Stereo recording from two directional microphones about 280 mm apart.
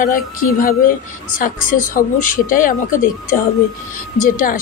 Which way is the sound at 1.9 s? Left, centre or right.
Left.